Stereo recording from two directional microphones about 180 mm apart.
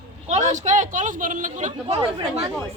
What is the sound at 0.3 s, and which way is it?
A man's voice, 40° right (ahead or behind).